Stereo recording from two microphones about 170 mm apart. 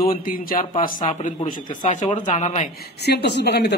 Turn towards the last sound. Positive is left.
turn(degrees=85)